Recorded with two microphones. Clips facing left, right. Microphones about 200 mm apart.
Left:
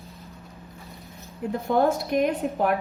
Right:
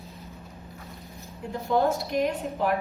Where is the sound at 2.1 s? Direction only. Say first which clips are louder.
Left 3 dB; 55° left (ahead or behind).